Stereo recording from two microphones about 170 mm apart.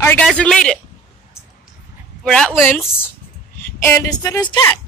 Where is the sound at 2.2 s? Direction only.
Centre (ahead or behind).